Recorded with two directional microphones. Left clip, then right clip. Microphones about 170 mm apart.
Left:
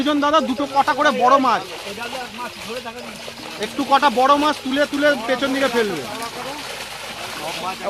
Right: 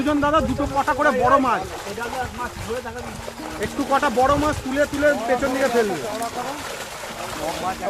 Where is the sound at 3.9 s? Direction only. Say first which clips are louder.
Left 4 dB; 45° left (ahead or behind).